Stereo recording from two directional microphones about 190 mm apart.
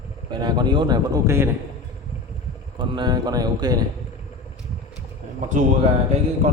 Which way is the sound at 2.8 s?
25° right (ahead or behind).